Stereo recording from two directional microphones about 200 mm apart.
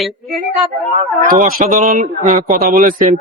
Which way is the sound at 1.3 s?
40° right (ahead or behind).